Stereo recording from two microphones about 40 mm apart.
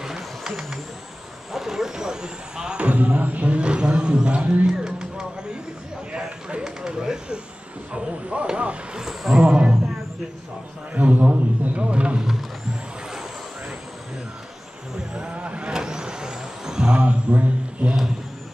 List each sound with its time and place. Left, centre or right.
0.0 s vehicle: centre
2.8 s speech: right
3.5 s vehicle: right
4.6 s music: centre
6.6 s a sound: centre
7.9 s speech: right
9.2 s a man's voice: centre
11.0 s speech: right
11.2 s a sound: right
15.3 s vehicle: right
15.7 s vehicle: centre